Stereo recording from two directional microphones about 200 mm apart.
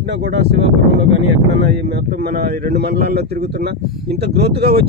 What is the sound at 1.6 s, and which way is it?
Speech, 55° right (ahead or behind).